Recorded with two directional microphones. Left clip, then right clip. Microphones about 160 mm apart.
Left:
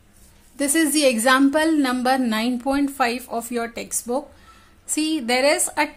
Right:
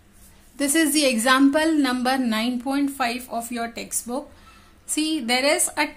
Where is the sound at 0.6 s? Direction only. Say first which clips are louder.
Left 2 dB; 20° left (ahead or behind).